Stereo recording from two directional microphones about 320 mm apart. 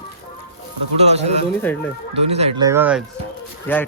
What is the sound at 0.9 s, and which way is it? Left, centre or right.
Speech, centre.